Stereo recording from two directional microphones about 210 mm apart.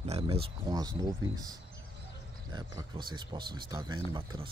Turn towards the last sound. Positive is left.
turn(degrees=-20)  # may be behind; listen again after turning